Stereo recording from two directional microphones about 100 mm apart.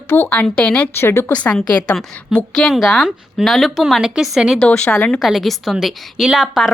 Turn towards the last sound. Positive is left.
turn(degrees=-5)  # may be behind; listen again after turning